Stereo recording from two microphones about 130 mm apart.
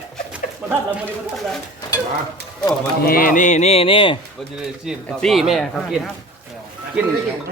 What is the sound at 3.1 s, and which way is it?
Music, 90° left.